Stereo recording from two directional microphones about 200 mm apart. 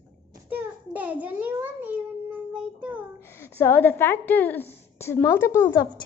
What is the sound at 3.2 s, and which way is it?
A woman's voice, 10° left (ahead or behind).